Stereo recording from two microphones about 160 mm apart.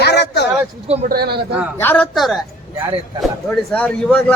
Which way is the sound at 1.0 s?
75° right (ahead or behind).